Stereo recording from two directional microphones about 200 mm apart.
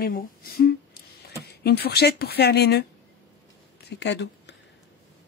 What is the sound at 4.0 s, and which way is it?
Speech, 60° left (ahead or behind).